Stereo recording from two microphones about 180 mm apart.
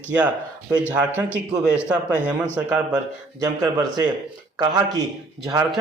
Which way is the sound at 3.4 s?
20° right (ahead or behind).